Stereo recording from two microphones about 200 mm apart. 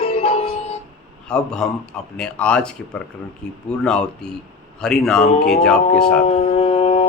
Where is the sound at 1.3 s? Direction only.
5° left (ahead or behind).